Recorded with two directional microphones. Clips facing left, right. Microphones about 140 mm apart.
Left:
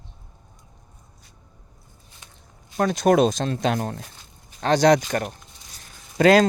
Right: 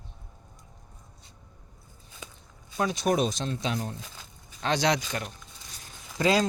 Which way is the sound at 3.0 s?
90° left.